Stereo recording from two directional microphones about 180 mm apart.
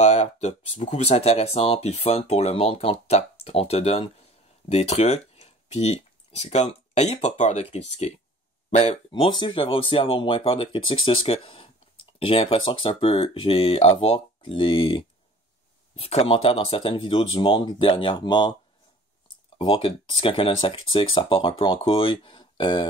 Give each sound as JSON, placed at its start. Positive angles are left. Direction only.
{"t": 0.0, "sound": "speech", "side_deg": 35}
{"t": 8.6, "sound": "a sound", "side_deg": 40}
{"t": 9.1, "sound": "speech", "side_deg": 25}
{"t": 19.6, "sound": "speech", "side_deg": 30}